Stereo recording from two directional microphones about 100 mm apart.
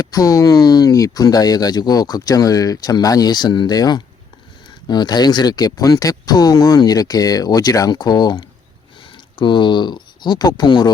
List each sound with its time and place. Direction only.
0.0 s speech: 35° left (ahead or behind)
9.1 s speech: 55° left (ahead or behind)